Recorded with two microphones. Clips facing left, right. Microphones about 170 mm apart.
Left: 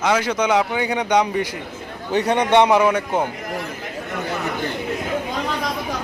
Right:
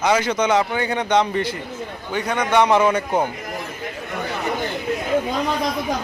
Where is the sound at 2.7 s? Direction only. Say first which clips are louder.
Even; 10° left (ahead or behind).